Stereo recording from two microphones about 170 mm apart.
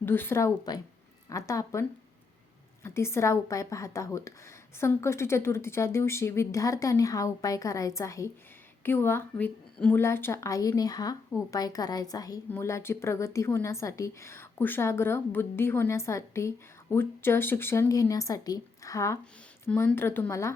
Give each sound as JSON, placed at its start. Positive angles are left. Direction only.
{"t": 0.0, "sound": "a woman's voice", "side_deg": 10}